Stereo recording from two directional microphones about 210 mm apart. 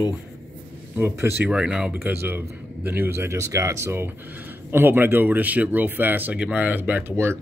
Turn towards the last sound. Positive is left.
turn(degrees=-10)  # may be behind; listen again after turning